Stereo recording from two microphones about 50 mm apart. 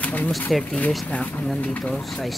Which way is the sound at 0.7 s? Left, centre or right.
Left.